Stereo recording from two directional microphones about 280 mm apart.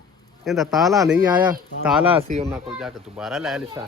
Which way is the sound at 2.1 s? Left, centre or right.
Right.